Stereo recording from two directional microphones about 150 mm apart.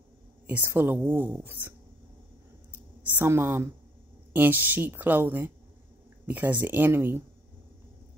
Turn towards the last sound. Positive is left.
turn(degrees=-15)  # may be behind; listen again after turning